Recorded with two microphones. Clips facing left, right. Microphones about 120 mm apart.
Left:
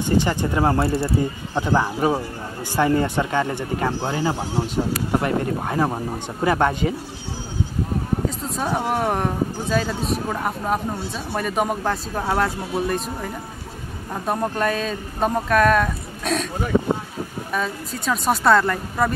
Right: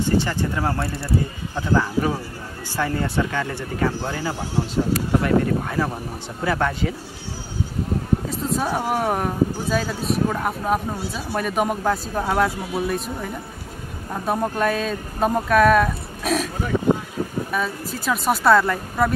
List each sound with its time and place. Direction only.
0.2 s speech: 15° left (ahead or behind)
8.3 s speech: centre (ahead or behind)
17.5 s speech: 5° right (ahead or behind)